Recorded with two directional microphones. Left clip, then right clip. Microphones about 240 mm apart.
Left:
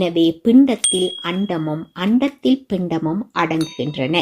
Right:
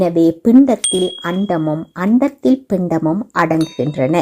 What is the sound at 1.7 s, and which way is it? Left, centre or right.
A woman's voice, centre.